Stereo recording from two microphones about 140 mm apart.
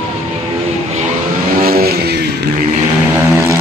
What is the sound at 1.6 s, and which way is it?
Vehicle, 90° right.